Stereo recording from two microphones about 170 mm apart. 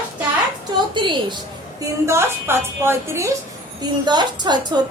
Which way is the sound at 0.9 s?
30° right (ahead or behind).